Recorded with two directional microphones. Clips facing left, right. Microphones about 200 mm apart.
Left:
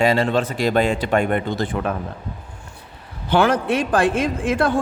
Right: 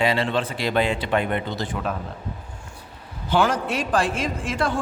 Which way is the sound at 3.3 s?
60° left (ahead or behind).